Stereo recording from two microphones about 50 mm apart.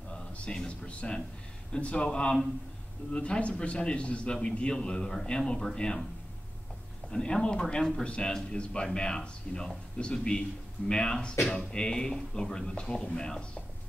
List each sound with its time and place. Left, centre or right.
0.1 s a man's voice: centre
7.1 s a man's voice: centre